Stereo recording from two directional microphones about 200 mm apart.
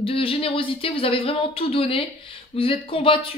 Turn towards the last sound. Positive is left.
turn(degrees=25)  # may be behind; listen again after turning